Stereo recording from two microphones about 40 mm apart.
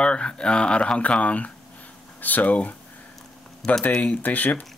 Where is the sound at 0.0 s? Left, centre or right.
Left.